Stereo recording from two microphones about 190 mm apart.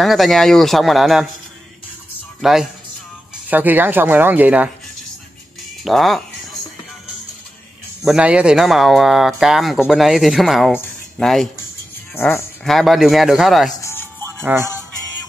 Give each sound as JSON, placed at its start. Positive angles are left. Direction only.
{"t": 0.0, "sound": "speech", "side_deg": 0}
{"t": 2.4, "sound": "speech", "side_deg": 0}
{"t": 5.9, "sound": "speech", "side_deg": 0}
{"t": 8.0, "sound": "speech", "side_deg": -5}
{"t": 12.2, "sound": "speech", "side_deg": 10}
{"t": 12.6, "sound": "speech", "side_deg": 0}
{"t": 13.7, "sound": "music", "side_deg": 15}